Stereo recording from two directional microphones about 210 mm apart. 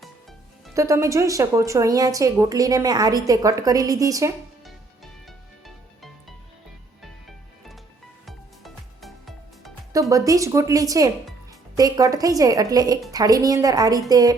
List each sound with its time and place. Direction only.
0.7 s speech: 15° right (ahead or behind)
7.0 s music: centre (ahead or behind)
9.9 s speech: 15° right (ahead or behind)